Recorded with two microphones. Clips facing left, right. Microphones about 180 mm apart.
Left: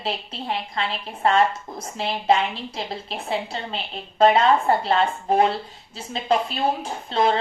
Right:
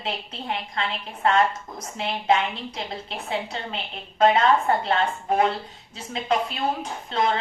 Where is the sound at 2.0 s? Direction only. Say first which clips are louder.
Left 2 dB; 35° left (ahead or behind).